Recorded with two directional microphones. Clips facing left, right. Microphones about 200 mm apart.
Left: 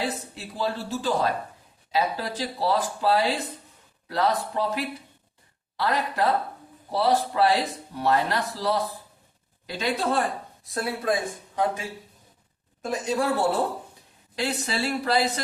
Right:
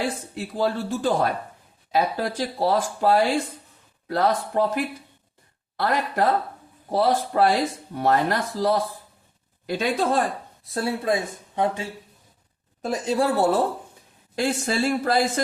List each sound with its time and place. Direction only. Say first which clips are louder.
0.3 s speech: right 8 dB; 50° right (ahead or behind)
10.8 s speech: right 2 dB; 25° right (ahead or behind)
14.3 s speech: right 5 dB; 50° right (ahead or behind)